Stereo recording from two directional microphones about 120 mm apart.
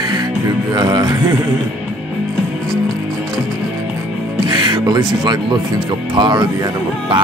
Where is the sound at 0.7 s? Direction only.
35° right (ahead or behind).